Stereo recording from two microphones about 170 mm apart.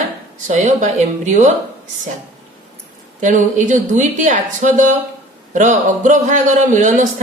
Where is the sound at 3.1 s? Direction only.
45° right (ahead or behind).